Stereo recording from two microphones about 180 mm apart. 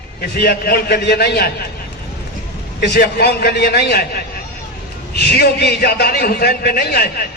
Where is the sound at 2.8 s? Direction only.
60° left (ahead or behind).